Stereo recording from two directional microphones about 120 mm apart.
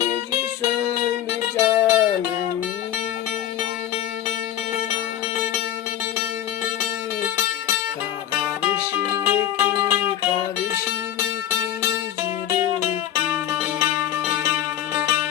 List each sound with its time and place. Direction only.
1.3 s music: 15° right (ahead or behind)
7.2 s music: 20° right (ahead or behind)
13.1 s music: 20° right (ahead or behind)